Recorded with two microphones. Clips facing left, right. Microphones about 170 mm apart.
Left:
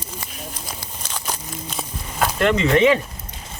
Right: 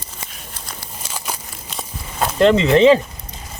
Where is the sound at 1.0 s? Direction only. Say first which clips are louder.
Right 1 dB; 5° right (ahead or behind).